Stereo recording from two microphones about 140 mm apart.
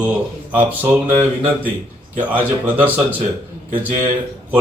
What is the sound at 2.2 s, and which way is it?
Speech, 10° right (ahead or behind).